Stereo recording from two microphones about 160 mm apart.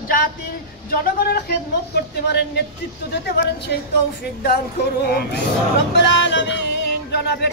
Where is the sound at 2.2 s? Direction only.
90° left.